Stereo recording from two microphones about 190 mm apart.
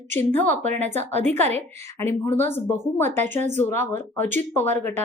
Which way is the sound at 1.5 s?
15° left (ahead or behind).